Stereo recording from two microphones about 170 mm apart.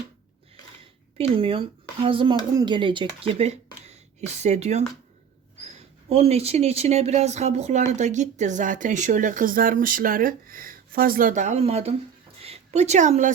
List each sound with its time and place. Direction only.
1.4 s a woman's voice: 30° right (ahead or behind)